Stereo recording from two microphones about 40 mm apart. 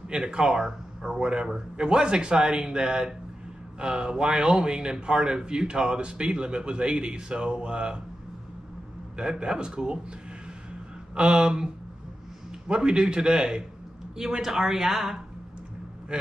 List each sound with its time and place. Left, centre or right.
0.2 s a man's voice: centre
9.1 s a man's voice: right
11.1 s a man's voice: centre
16.1 s a man's voice: right